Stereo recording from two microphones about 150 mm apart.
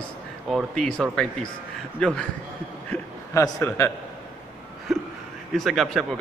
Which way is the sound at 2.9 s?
20° left (ahead or behind).